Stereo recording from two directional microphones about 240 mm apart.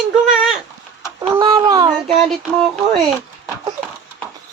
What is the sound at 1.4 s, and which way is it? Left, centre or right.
Child singing, centre.